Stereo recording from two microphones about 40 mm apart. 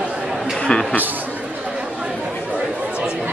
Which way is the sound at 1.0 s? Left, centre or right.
Right.